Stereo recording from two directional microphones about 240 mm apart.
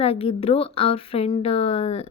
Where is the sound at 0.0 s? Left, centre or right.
Left.